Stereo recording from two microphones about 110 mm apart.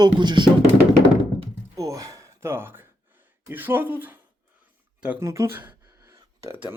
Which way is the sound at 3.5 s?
20° right (ahead or behind).